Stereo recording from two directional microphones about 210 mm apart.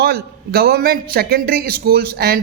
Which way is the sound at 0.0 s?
45° right (ahead or behind).